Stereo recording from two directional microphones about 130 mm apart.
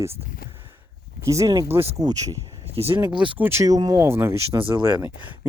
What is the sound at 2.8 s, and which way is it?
Speech, 50° right (ahead or behind).